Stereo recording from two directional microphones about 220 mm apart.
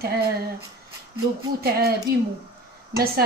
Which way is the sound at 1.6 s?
45° right (ahead or behind).